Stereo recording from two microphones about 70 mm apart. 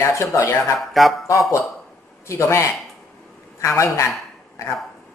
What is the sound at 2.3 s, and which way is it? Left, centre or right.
Speech, left.